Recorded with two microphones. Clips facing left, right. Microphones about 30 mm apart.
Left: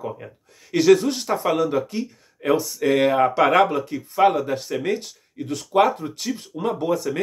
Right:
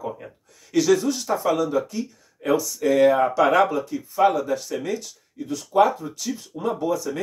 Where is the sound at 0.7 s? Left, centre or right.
Left.